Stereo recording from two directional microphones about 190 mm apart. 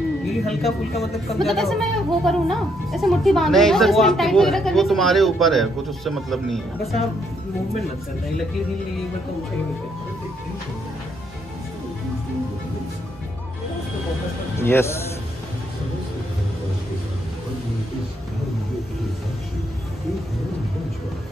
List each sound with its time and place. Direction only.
0.5 s a woman's voice: centre (ahead or behind)
14.6 s a man's voice: 15° left (ahead or behind)